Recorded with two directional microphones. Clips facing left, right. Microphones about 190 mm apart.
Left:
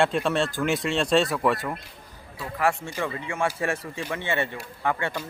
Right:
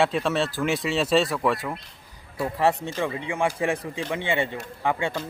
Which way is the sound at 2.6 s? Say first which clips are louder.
Right 2 dB; 25° right (ahead or behind).